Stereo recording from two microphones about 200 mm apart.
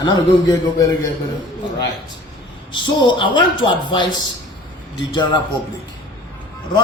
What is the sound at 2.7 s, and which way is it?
Speech, 25° left (ahead or behind).